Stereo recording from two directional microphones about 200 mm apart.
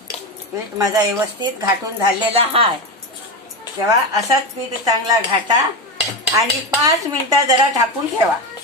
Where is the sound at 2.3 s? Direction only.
30° right (ahead or behind).